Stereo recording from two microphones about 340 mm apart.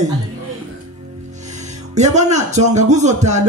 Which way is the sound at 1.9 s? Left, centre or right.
Centre.